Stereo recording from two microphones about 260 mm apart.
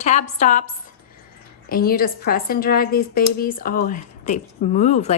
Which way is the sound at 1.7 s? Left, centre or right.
Left.